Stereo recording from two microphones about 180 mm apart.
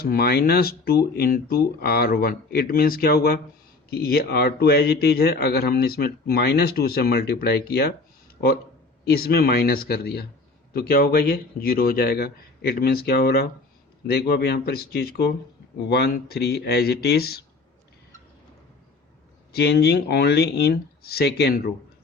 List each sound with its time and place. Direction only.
0.0 s a man's voice: 60° left (ahead or behind)
9.0 s a man's voice: 60° left (ahead or behind)
19.5 s a man's voice: 65° left (ahead or behind)